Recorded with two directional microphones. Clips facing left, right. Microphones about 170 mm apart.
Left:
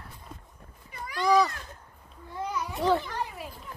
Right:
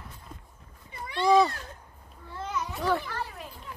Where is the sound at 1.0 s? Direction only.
25° right (ahead or behind).